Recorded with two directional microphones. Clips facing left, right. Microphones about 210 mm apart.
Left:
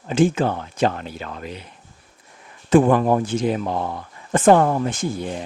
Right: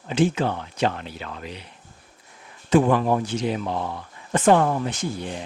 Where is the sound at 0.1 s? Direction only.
45° left (ahead or behind).